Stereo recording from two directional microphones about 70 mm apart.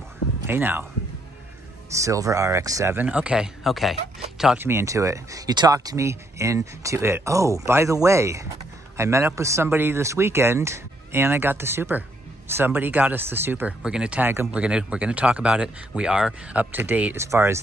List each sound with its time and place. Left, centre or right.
0.5 s speech: right
2.0 s speech: right
3.1 s speech: centre
3.6 s speech: centre
4.6 s speech: right
5.5 s speech: right
5.9 s speech: right
9.7 s speech: right
13.7 s speech: centre
14.2 s speech: right
14.5 s speech: centre
16.7 s speech: right
17.2 s speech: right